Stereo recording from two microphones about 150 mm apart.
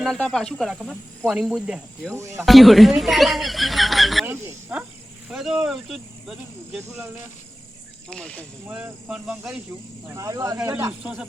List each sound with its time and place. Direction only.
0.0 s speech: 5° left (ahead or behind)
2.1 s speech: 20° right (ahead or behind)
2.4 s speech: centre (ahead or behind)
4.3 s speech: 15° right (ahead or behind)
5.3 s speech: 5° right (ahead or behind)
6.7 s speech: 15° right (ahead or behind)
8.1 s speech: 5° left (ahead or behind)
8.6 s speech: 5° right (ahead or behind)
10.1 s speech: 20° right (ahead or behind)
11.0 s speech: 5° right (ahead or behind)